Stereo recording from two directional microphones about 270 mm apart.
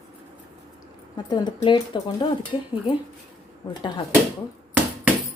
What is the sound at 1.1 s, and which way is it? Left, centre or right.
A woman's voice, centre.